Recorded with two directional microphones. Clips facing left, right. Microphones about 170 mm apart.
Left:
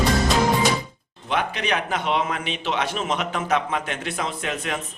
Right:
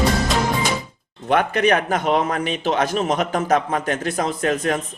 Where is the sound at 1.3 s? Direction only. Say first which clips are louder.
Right 7 dB; 50° right (ahead or behind).